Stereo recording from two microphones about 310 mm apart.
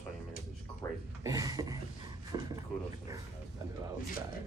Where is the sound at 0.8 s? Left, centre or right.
Centre.